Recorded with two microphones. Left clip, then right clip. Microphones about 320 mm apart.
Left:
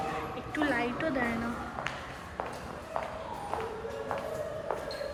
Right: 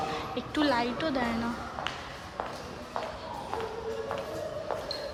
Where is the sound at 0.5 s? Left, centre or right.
Centre.